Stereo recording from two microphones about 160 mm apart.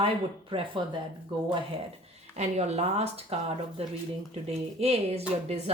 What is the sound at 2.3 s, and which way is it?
A woman's voice, 45° right (ahead or behind).